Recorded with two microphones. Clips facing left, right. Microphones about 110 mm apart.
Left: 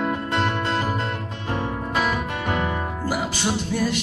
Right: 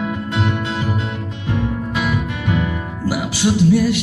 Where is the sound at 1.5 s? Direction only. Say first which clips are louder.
Right 3 dB; 40° left (ahead or behind).